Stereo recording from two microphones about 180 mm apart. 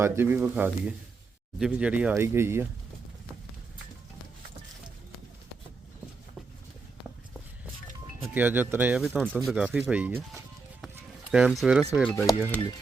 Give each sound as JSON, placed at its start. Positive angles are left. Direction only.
{"t": 0.0, "sound": "speech", "side_deg": -15}
{"t": 8.2, "sound": "speech", "side_deg": -10}
{"t": 11.3, "sound": "speech", "side_deg": 0}
{"t": 12.0, "sound": "speech", "side_deg": 15}